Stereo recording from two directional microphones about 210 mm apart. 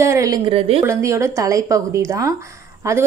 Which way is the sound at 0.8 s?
15° right (ahead or behind).